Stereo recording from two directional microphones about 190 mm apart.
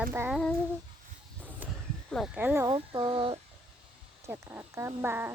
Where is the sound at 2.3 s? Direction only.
10° right (ahead or behind).